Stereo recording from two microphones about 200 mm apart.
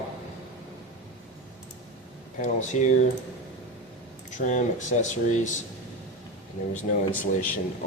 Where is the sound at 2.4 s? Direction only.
40° left (ahead or behind).